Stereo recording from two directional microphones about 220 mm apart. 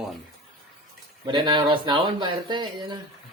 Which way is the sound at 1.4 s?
20° right (ahead or behind).